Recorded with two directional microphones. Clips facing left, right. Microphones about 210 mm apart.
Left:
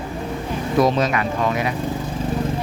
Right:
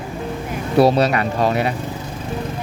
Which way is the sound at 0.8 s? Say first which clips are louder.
Right 4 dB; 35° right (ahead or behind).